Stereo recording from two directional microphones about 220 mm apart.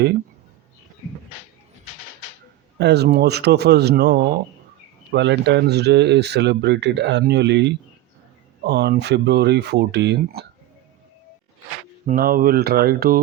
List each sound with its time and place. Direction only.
2.7 s speech: 50° right (ahead or behind)
12.0 s speech: 40° right (ahead or behind)